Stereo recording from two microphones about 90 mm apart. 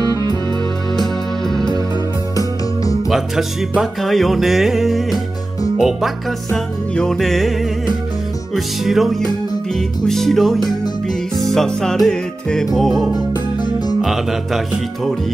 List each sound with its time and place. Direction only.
2.3 s music: 40° left (ahead or behind)
3.8 s music: centre (ahead or behind)
8.5 s music: centre (ahead or behind)
13.1 s music: 50° left (ahead or behind)
14.0 s music: 5° right (ahead or behind)